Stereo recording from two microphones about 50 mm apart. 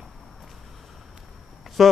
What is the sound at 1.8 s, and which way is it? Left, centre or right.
Speech, centre.